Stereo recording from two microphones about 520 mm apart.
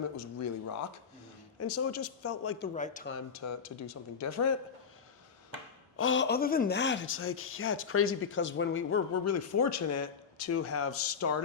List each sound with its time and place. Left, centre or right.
0.2 s speech: left; by 3.1 s centre
3.4 s speech: left
6.0 s speech: left